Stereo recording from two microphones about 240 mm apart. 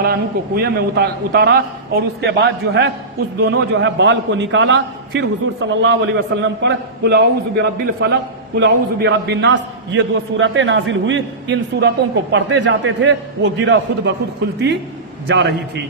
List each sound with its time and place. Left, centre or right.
0.0 s a man's voice: right
15.3 s a man's voice: right